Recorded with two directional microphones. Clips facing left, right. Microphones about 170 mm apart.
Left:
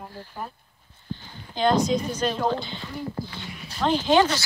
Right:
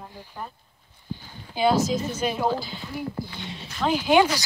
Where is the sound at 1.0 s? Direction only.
10° right (ahead or behind).